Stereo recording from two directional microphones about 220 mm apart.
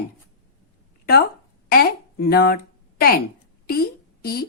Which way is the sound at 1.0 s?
45° left (ahead or behind).